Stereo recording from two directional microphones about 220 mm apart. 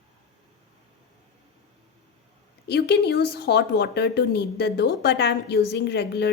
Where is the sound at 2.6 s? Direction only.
50° left (ahead or behind).